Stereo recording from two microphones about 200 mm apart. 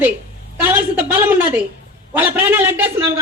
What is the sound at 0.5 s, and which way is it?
A man's voice, 10° right (ahead or behind).